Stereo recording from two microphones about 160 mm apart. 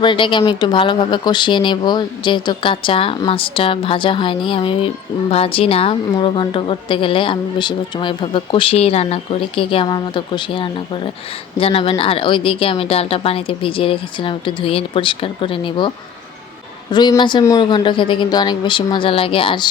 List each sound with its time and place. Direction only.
0.0 s a woman's voice: 30° left (ahead or behind)
16.9 s a woman's voice: 25° left (ahead or behind)